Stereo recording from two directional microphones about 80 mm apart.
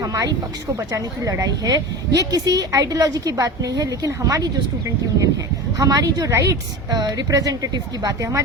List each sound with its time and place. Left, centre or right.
0.0 s a woman's voice: right
5.7 s a woman's voice: right